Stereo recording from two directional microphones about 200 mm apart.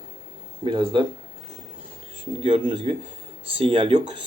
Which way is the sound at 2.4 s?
25° right (ahead or behind).